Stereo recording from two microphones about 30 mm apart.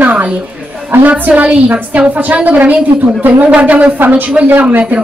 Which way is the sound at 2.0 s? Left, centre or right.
Right.